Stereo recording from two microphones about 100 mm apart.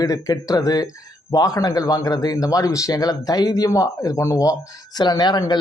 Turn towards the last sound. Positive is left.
turn(degrees=45)  # may be behind; listen again after turning